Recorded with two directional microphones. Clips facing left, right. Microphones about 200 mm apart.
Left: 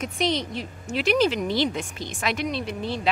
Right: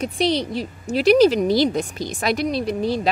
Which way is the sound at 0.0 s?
35° right (ahead or behind).